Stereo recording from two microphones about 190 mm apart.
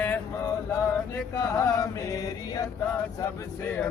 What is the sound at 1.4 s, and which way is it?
Speech, 15° left (ahead or behind).